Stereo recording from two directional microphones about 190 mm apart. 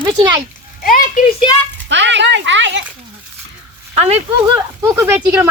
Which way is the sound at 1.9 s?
70° right (ahead or behind).